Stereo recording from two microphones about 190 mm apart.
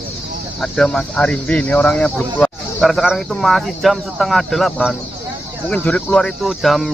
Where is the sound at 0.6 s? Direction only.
5° left (ahead or behind).